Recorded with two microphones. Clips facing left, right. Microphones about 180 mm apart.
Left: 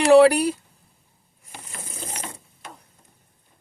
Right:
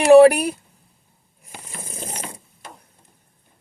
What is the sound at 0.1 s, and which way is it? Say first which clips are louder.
Speech: right 4 dB; 15° right (ahead or behind).